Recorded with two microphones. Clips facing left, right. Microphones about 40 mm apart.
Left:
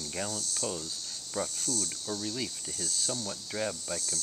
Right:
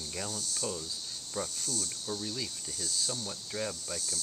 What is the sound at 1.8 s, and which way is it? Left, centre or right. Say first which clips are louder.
Cricket: left 1 dB; centre.